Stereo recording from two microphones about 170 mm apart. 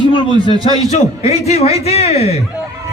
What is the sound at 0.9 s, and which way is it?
Speech, 40° left (ahead or behind).